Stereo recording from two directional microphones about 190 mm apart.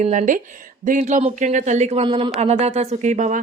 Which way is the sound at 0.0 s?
40° right (ahead or behind).